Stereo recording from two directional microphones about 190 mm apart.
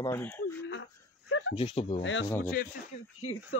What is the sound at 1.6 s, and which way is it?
Speech, 30° left (ahead or behind).